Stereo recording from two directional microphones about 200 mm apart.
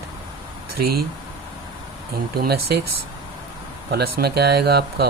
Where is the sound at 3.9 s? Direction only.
50° right (ahead or behind).